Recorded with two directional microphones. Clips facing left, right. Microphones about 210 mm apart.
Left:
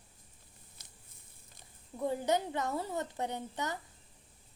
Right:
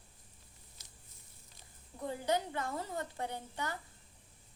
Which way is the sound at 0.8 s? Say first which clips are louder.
Even; 55° left (ahead or behind).